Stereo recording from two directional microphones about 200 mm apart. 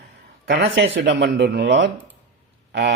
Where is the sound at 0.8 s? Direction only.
65° right (ahead or behind).